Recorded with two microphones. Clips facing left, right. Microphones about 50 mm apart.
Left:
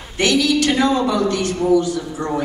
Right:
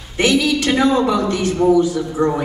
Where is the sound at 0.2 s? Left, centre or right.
Centre.